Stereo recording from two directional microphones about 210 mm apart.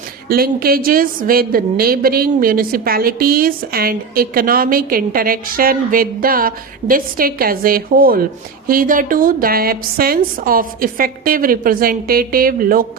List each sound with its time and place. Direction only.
0.3 s a woman's voice: 45° right (ahead or behind)